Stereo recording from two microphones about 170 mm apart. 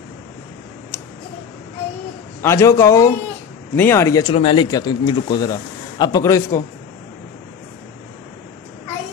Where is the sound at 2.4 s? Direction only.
15° left (ahead or behind).